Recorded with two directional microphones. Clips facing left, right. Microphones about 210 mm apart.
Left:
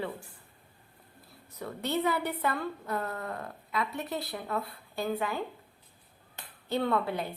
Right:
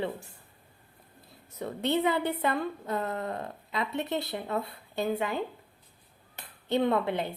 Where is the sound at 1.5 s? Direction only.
25° right (ahead or behind).